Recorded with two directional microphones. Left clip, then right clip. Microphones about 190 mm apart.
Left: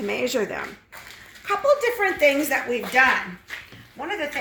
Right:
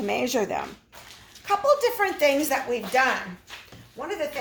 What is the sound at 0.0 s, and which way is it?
A woman's voice, 30° right (ahead or behind).